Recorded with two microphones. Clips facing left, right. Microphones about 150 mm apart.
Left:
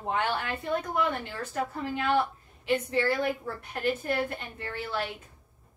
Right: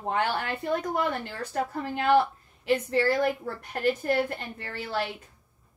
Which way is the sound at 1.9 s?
40° right (ahead or behind).